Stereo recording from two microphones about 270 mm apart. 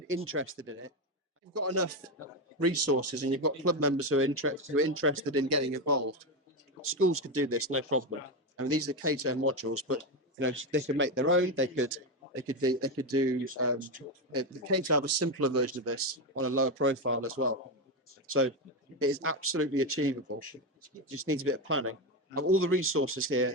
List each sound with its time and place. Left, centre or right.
0.3 s speech: right
1.5 s speech: right
6.8 s speech: right
14.3 s speech: right